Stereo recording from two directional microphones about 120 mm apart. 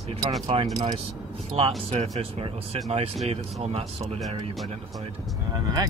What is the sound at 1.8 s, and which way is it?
Speech, 55° right (ahead or behind).